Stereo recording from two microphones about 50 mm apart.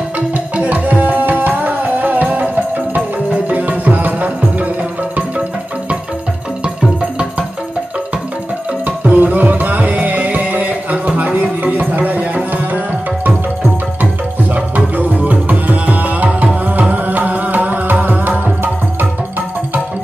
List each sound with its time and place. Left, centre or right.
0.6 s tabla: right
3.4 s music: right
8.8 s music: right
15.0 s tabla: right
16.9 s music: right